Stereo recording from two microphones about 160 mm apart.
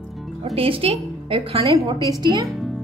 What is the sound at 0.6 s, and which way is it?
Speech, 35° right (ahead or behind).